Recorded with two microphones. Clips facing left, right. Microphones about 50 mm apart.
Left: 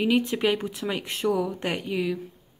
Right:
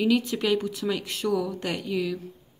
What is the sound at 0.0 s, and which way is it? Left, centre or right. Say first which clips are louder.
Speech: left 1 dB; left.